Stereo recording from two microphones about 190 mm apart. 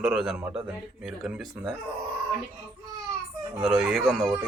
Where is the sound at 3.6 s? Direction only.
5° right (ahead or behind).